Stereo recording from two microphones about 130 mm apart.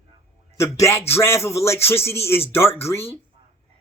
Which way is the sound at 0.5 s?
20° left (ahead or behind).